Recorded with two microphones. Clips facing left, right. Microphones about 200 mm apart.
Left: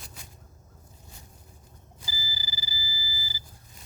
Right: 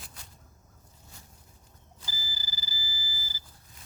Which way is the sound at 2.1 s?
10° left (ahead or behind).